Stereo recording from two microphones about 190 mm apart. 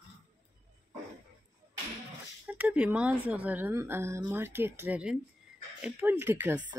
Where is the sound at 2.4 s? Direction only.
5° right (ahead or behind).